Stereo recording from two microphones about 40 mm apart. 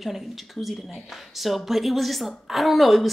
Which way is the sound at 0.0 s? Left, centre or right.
Centre.